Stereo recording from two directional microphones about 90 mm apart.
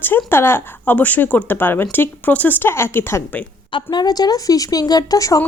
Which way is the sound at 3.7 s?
60° left (ahead or behind).